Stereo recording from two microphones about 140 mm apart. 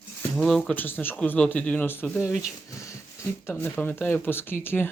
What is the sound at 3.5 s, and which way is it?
Speech, 10° left (ahead or behind).